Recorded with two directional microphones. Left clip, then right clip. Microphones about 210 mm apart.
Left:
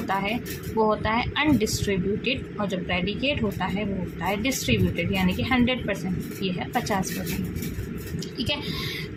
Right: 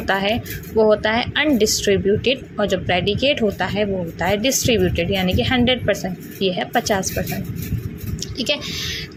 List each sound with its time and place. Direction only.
0.1 s a woman's voice: 25° right (ahead or behind)
8.4 s a woman's voice: 25° right (ahead or behind)